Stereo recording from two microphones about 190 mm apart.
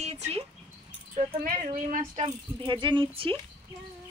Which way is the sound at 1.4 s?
45° right (ahead or behind).